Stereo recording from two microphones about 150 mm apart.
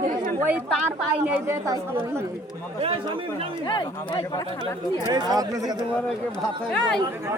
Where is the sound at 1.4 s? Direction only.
20° right (ahead or behind).